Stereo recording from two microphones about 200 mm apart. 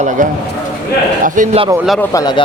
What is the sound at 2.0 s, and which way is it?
Speech, 15° left (ahead or behind).